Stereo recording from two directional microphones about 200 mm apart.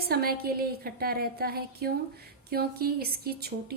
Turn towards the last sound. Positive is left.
turn(degrees=-50)  # may be behind; listen again after turning